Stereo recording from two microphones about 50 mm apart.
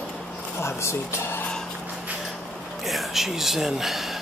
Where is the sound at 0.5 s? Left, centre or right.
Left.